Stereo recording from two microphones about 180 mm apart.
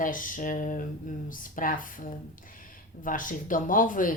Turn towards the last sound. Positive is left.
turn(degrees=50)  # may be behind; listen again after turning